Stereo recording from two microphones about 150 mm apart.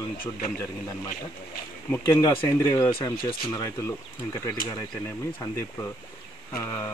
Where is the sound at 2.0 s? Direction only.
20° left (ahead or behind).